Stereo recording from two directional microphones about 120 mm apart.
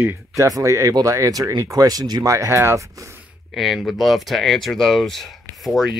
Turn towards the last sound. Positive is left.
turn(degrees=0)  # may be behind; listen again after turning